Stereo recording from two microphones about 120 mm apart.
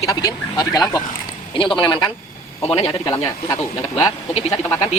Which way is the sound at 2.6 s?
55° left (ahead or behind).